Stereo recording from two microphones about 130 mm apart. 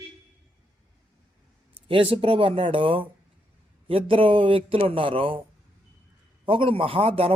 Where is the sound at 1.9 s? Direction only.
45° right (ahead or behind).